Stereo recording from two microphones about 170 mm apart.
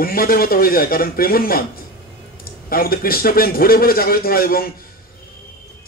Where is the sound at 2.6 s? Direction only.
60° left (ahead or behind).